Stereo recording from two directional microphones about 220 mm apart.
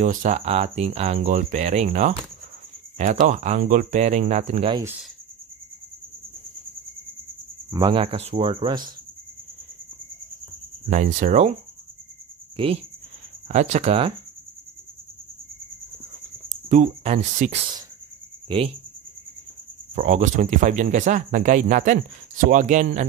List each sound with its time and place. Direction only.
0.0 s speech: 35° right (ahead or behind)
7.7 s speech: 20° right (ahead or behind)
10.9 s speech: 35° right (ahead or behind)
12.6 s speech: 25° right (ahead or behind)
16.4 s speech: 35° right (ahead or behind)
20.0 s speech: 35° right (ahead or behind)